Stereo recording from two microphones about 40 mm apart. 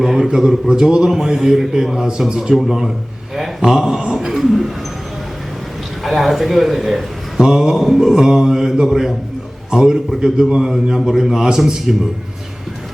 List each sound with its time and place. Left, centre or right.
0.2 s a man's voice: centre
6.0 s a man's voice: centre
7.4 s a man's voice: centre